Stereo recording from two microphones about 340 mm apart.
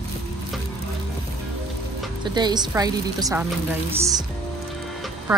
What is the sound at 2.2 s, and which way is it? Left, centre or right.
A woman's voice, centre.